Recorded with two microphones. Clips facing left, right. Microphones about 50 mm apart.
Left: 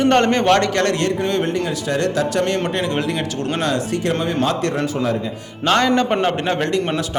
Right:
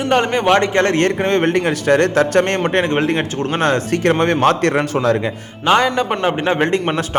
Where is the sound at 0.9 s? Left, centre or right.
Right.